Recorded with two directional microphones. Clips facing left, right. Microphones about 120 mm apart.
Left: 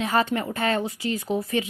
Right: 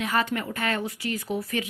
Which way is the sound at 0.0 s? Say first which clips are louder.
Left 3 dB; 30° left (ahead or behind).